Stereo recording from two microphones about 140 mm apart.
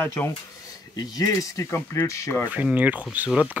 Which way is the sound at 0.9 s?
25° left (ahead or behind).